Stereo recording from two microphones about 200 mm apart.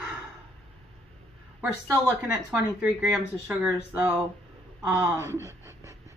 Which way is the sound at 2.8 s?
5° right (ahead or behind).